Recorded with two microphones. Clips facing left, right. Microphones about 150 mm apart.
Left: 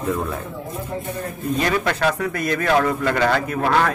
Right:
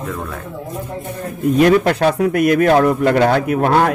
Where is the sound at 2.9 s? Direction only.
60° right (ahead or behind).